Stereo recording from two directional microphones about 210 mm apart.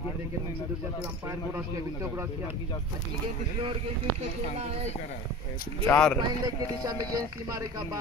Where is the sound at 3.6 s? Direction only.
25° right (ahead or behind).